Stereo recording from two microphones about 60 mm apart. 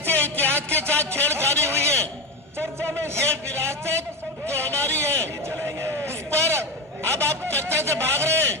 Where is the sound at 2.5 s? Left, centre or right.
Right.